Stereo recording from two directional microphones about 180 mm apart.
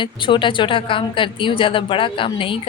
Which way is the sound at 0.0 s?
25° left (ahead or behind).